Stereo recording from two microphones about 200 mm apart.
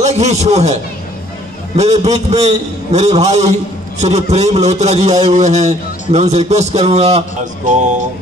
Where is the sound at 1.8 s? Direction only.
35° right (ahead or behind).